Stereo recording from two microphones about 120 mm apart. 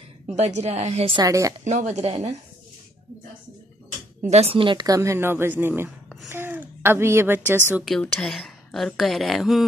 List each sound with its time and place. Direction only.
0.4 s a woman's voice: 65° right (ahead or behind)
1.1 s speech: 30° right (ahead or behind)
1.6 s speech: 80° right; by 2.3 s 65° right (ahead or behind)
4.3 s a woman's voice: 55° right (ahead or behind)
4.8 s a woman's voice: 25° right (ahead or behind)
7.8 s speech: 5° left (ahead or behind)